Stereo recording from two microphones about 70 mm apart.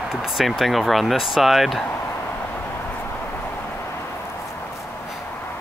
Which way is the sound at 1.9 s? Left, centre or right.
Left.